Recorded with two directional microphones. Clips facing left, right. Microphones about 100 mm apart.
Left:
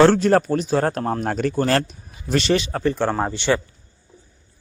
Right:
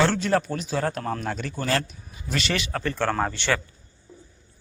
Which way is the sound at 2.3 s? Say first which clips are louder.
Left 8 dB; 30° left (ahead or behind).